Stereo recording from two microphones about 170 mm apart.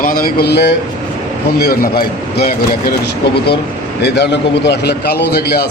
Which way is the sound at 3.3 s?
75° left (ahead or behind).